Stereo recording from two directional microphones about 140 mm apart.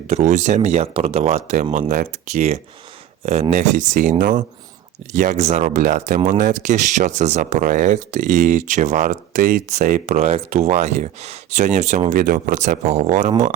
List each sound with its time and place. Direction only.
0.1 s speech: 60° right (ahead or behind); by 2.4 s 75° right (ahead or behind)
3.5 s speech: 60° right (ahead or behind)